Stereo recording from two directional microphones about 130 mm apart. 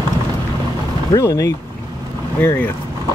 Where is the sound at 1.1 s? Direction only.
25° left (ahead or behind).